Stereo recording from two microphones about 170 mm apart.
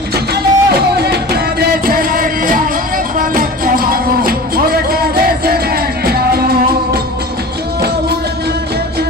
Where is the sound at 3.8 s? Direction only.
60° right (ahead or behind).